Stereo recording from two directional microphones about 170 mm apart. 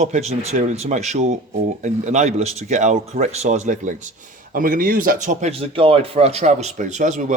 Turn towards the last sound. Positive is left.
turn(degrees=-45)  # may be behind; listen again after turning